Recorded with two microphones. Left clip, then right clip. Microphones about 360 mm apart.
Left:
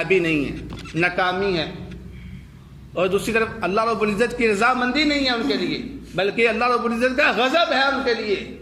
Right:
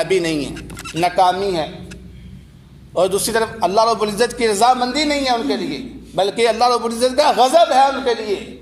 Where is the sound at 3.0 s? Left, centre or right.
Centre.